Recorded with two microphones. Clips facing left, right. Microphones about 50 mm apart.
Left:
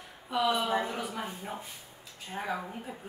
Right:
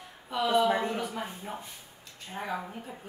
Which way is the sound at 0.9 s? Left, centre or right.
Centre.